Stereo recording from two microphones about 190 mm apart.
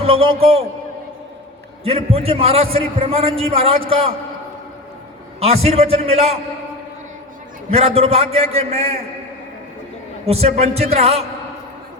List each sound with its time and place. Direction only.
0.0 s a man's voice: 30° right (ahead or behind)
1.8 s a man's voice: 30° right (ahead or behind)
5.4 s a man's voice: 30° right (ahead or behind)
7.7 s a man's voice: 30° right (ahead or behind)
10.2 s a man's voice: 30° right (ahead or behind)